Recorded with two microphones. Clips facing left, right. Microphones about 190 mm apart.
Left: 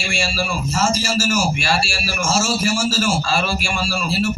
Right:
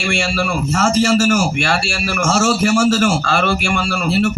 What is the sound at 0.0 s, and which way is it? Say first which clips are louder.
A man's voice: right 5 dB; 65° right (ahead or behind).